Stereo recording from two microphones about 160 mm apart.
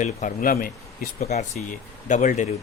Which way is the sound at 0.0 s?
55° left (ahead or behind).